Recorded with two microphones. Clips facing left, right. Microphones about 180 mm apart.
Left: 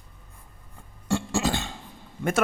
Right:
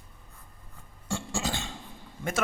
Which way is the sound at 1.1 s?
60° left (ahead or behind).